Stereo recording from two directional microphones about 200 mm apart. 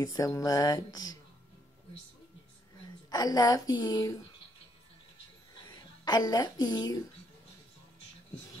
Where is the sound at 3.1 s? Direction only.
20° left (ahead or behind).